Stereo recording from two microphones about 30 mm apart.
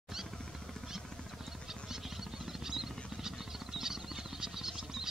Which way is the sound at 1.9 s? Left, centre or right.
Centre.